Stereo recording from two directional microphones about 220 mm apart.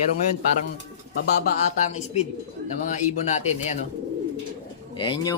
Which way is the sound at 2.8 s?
35° left (ahead or behind).